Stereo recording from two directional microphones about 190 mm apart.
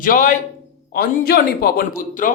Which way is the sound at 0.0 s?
45° left (ahead or behind).